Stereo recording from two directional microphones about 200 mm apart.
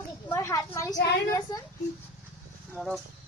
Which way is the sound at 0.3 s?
15° left (ahead or behind).